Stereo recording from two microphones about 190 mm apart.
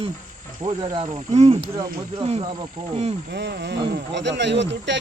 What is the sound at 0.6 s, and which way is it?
Speech, 25° right (ahead or behind).